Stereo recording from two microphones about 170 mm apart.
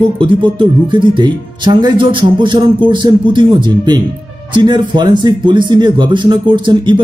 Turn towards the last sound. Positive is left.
turn(degrees=-30)  # may be behind; listen again after turning